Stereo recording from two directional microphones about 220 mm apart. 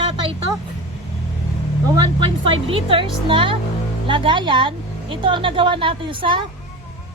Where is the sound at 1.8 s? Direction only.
20° right (ahead or behind).